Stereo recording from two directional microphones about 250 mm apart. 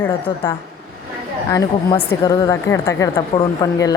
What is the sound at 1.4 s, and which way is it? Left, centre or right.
Speech, centre.